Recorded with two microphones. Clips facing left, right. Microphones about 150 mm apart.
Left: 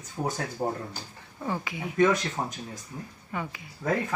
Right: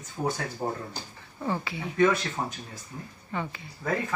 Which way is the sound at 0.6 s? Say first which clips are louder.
Left 2 dB; 15° left (ahead or behind).